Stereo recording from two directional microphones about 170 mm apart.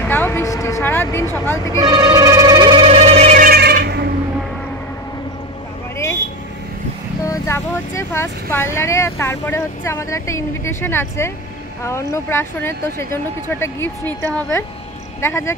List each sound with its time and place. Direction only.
0.0 s a woman's voice: 10° left (ahead or behind)
1.8 s telephone: 25° right (ahead or behind); by 3.3 s 40° right (ahead or behind)
3.3 s telephone bell ringing: 65° right (ahead or behind)
7.2 s speech: 15° left (ahead or behind)